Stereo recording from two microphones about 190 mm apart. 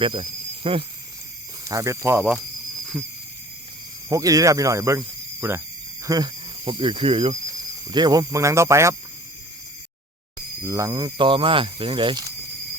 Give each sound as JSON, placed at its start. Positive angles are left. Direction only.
{"t": 0.0, "sound": "speech", "side_deg": -30}
{"t": 1.6, "sound": "speech", "side_deg": -15}
{"t": 4.1, "sound": "speech", "side_deg": -20}
{"t": 10.6, "sound": "speech", "side_deg": -15}